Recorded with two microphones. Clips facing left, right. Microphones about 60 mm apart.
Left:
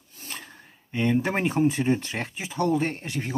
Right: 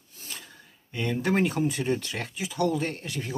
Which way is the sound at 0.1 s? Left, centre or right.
Left.